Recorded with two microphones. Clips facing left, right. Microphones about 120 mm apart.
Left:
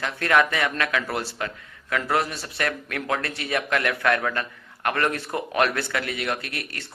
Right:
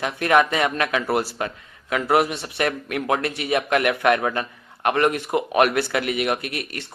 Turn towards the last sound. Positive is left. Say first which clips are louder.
# right 4 dB
turn(degrees=-20)  # may be behind; listen again after turning